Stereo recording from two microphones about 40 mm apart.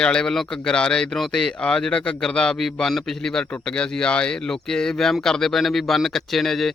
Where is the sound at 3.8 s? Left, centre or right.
Left.